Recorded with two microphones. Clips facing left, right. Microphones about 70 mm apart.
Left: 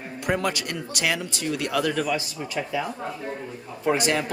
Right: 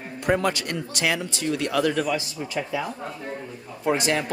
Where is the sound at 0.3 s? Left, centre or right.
Right.